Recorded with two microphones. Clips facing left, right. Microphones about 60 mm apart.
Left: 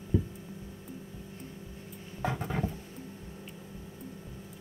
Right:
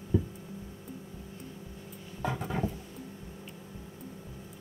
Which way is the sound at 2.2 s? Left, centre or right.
Centre.